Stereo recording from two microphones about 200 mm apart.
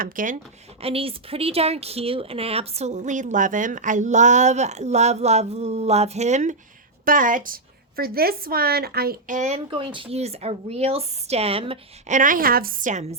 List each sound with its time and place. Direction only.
0.0 s a woman's voice: 40° right (ahead or behind)
0.8 s a woman's voice: 30° right (ahead or behind)